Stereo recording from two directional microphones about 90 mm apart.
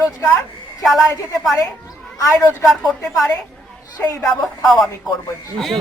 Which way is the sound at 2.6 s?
Centre (ahead or behind).